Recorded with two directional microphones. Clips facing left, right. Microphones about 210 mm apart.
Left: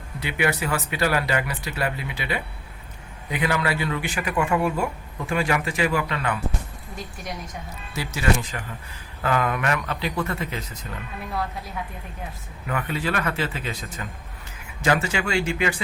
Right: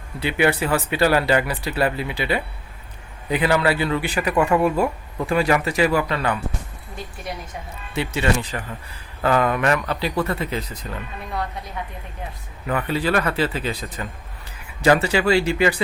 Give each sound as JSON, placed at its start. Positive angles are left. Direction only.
{"t": 0.2, "sound": "speech", "side_deg": -30}
{"t": 7.9, "sound": "speech", "side_deg": -30}
{"t": 11.3, "sound": "a woman's voice", "side_deg": 0}
{"t": 12.6, "sound": "speech", "side_deg": -35}